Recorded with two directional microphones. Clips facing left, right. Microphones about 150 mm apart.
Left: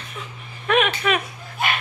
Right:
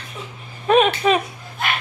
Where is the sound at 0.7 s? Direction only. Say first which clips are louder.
Right 5 dB; 35° right (ahead or behind).